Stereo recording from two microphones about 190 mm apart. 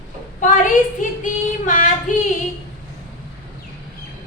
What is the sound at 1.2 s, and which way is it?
Female singing, 45° left (ahead or behind).